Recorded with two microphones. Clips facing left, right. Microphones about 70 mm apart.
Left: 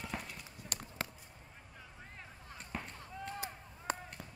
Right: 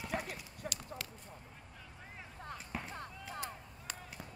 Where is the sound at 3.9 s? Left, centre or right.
Left.